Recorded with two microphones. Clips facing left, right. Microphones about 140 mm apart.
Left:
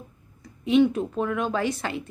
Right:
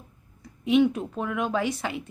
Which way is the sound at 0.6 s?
10° right (ahead or behind).